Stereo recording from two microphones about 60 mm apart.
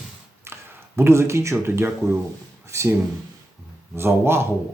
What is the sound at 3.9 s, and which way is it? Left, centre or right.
Speech, right.